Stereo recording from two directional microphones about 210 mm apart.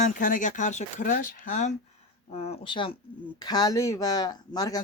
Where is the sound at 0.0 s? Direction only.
40° left (ahead or behind).